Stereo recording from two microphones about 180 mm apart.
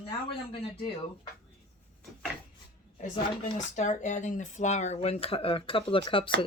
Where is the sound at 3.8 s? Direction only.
40° left (ahead or behind).